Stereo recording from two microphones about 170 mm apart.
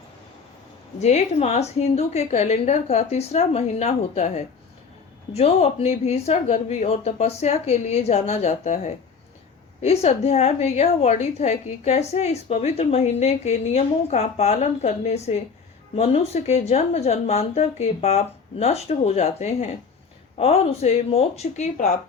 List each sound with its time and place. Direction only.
0.9 s a woman's voice: 40° left (ahead or behind)
20.4 s a woman's voice: 35° left (ahead or behind)